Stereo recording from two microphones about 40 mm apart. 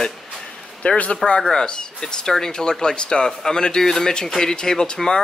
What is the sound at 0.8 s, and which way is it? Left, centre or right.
Speech, left.